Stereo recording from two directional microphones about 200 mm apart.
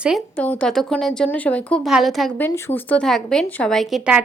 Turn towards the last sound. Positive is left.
turn(degrees=-5)  # may be behind; listen again after turning